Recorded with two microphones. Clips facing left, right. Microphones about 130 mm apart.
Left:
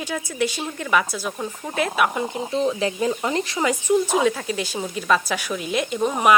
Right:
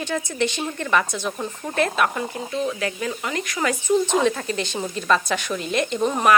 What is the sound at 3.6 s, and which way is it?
Speech, 15° left (ahead or behind).